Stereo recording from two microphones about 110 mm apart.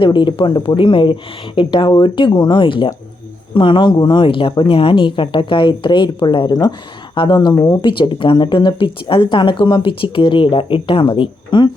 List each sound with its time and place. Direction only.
0.0 s speech: 45° left (ahead or behind)